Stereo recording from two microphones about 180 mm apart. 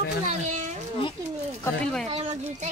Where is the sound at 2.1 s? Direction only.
30° right (ahead or behind).